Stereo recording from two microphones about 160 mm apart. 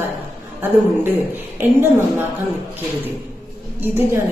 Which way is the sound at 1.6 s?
15° right (ahead or behind).